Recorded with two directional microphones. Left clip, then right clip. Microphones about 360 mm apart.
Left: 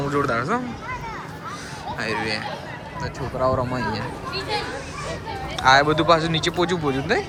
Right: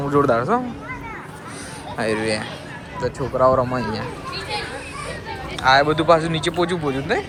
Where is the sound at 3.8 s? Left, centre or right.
Left.